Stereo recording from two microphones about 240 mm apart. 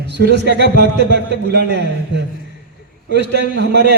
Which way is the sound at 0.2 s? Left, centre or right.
Right.